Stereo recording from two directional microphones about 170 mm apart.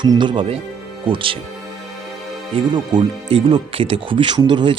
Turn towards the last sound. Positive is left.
turn(degrees=-25)  # may be behind; listen again after turning